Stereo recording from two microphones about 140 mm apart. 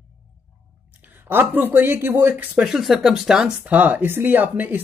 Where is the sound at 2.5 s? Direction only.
5° right (ahead or behind).